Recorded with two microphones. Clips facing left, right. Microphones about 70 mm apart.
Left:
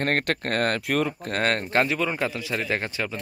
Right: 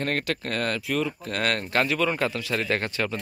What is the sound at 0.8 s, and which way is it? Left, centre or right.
Speech, left.